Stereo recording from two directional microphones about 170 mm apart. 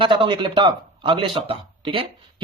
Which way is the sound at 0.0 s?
30° right (ahead or behind).